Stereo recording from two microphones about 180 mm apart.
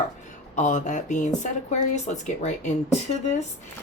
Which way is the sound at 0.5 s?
45° left (ahead or behind).